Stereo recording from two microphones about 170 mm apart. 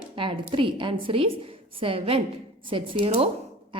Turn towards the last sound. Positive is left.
turn(degrees=-35)  # may be behind; listen again after turning